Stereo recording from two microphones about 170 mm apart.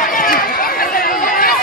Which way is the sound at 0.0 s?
55° left (ahead or behind).